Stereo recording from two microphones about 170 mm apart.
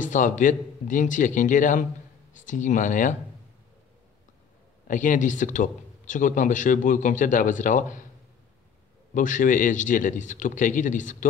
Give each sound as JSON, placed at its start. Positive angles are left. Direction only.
{"t": 0.0, "sound": "a man's voice", "side_deg": 50}
{"t": 4.8, "sound": "a man's voice", "side_deg": 50}
{"t": 9.1, "sound": "a man's voice", "side_deg": 50}